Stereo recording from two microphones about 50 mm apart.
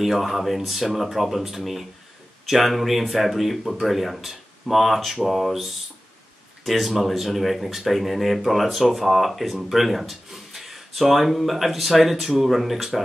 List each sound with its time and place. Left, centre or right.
0.0 s speech: centre